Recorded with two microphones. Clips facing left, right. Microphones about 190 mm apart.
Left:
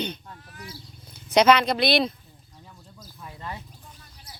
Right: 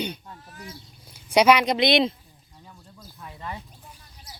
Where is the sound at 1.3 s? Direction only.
10° right (ahead or behind).